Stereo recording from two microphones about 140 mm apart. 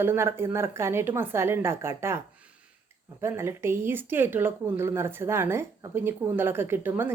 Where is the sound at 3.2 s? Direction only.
20° right (ahead or behind).